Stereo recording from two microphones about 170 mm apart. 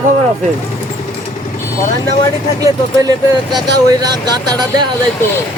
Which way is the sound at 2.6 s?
20° right (ahead or behind).